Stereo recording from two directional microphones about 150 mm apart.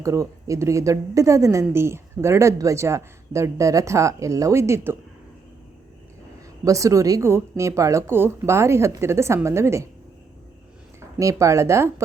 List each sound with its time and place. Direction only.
0.0 s speech: 20° right (ahead or behind)
6.7 s speech: 20° right (ahead or behind)
11.2 s speech: 20° right (ahead or behind)